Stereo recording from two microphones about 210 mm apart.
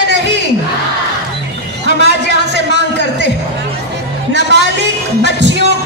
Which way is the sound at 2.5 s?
55° right (ahead or behind).